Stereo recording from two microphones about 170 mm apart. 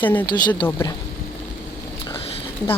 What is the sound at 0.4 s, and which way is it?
Speech, 25° left (ahead or behind).